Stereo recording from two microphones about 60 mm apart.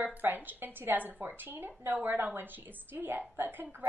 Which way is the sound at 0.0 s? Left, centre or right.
Right.